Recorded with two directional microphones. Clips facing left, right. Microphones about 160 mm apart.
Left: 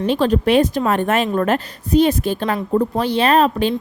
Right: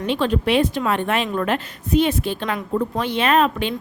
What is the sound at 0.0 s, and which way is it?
A woman's voice, 40° left (ahead or behind).